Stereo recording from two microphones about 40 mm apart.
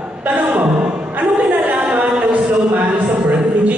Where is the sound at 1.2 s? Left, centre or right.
Right.